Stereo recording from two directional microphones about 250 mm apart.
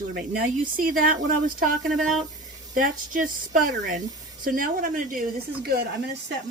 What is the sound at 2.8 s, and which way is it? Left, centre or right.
Speech, right.